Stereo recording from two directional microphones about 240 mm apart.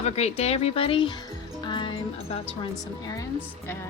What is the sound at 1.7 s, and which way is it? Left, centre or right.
Music, left.